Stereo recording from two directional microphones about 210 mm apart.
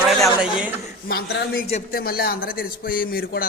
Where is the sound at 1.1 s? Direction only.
50° left (ahead or behind).